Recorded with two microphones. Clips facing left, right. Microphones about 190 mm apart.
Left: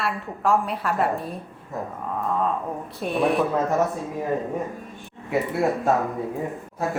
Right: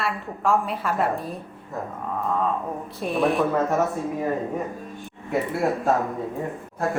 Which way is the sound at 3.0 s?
Centre (ahead or behind).